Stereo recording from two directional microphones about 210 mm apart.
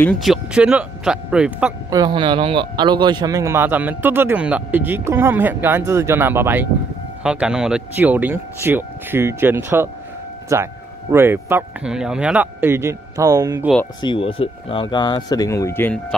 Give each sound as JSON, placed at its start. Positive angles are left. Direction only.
{"t": 0.0, "sound": "speech", "side_deg": 0}
{"t": 1.9, "sound": "speech", "side_deg": -20}
{"t": 14.0, "sound": "speech", "side_deg": 25}